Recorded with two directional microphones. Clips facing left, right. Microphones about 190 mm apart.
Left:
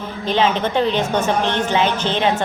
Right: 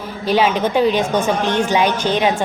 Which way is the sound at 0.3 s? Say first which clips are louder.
Right 2 dB; 10° right (ahead or behind).